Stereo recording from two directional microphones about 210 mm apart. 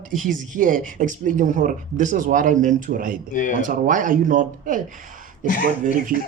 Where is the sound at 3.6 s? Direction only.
40° right (ahead or behind).